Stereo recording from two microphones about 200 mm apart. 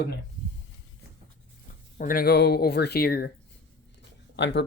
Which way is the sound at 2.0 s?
45° left (ahead or behind).